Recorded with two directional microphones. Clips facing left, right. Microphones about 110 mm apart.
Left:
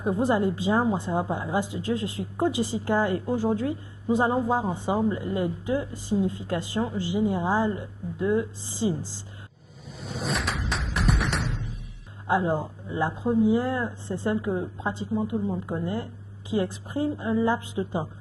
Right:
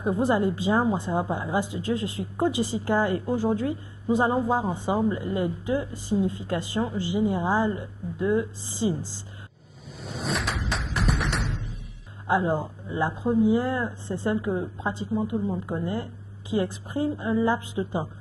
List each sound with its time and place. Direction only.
0.0 s speech: 15° right (ahead or behind)
10.0 s music: centre (ahead or behind)
12.3 s speech: 15° right (ahead or behind)